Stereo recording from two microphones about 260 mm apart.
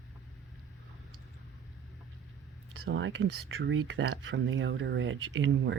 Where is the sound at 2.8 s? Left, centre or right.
Right.